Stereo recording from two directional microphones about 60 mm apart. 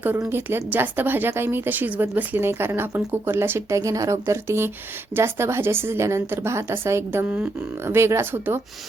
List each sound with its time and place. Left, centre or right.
0.3 s speech: right
3.8 s a woman's voice: right